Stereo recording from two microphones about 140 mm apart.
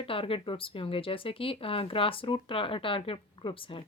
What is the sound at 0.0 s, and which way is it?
Speech, 40° left (ahead or behind).